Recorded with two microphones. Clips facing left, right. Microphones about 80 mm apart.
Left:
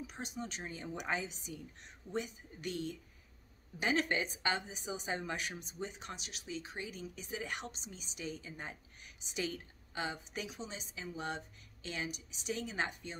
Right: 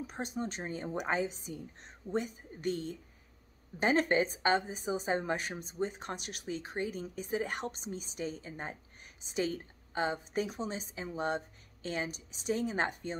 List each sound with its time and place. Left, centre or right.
0.0 s a woman's voice: right